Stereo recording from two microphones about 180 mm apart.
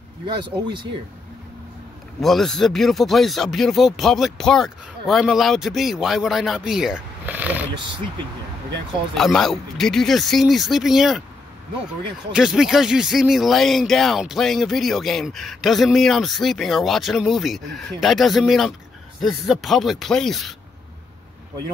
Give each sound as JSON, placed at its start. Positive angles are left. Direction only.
{"t": 0.4, "sound": "speech", "side_deg": -25}
{"t": 2.1, "sound": "speech", "side_deg": 0}
{"t": 9.1, "sound": "speech", "side_deg": 0}
{"t": 12.3, "sound": "speech", "side_deg": -5}